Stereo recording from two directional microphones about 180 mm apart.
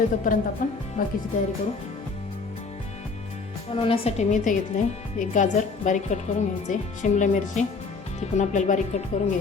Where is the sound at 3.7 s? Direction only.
30° left (ahead or behind).